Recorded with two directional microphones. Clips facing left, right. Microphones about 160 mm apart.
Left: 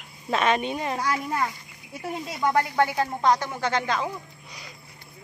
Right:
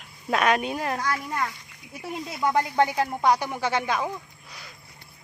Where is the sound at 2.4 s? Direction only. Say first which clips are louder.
Even; 15° right (ahead or behind).